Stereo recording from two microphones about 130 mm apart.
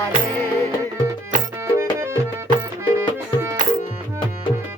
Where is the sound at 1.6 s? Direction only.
20° right (ahead or behind).